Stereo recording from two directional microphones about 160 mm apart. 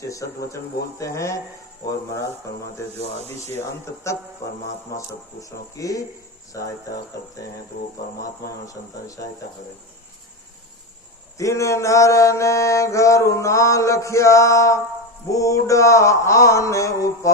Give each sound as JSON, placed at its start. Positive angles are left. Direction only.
{"t": 0.5, "sound": "speech", "side_deg": 15}
{"t": 4.9, "sound": "mantra", "side_deg": 20}
{"t": 8.2, "sound": "mantra", "side_deg": 20}
{"t": 11.3, "sound": "mantra", "side_deg": 20}